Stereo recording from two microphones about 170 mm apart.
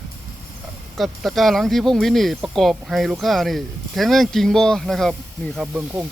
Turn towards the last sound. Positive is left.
turn(degrees=0)  # may be behind; listen again after turning